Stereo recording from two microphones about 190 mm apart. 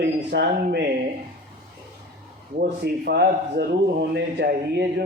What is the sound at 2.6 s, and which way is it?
A man's voice, 55° right (ahead or behind).